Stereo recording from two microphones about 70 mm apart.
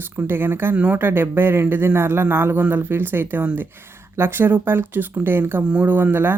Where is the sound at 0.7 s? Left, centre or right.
Centre.